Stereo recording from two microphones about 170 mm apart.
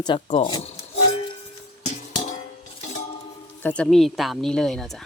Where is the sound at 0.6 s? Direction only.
35° left (ahead or behind).